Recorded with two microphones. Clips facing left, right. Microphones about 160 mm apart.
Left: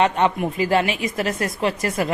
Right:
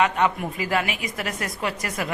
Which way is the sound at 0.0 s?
30° left (ahead or behind).